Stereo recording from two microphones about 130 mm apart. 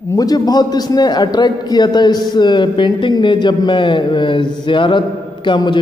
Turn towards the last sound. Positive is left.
turn(degrees=40)  # may be behind; listen again after turning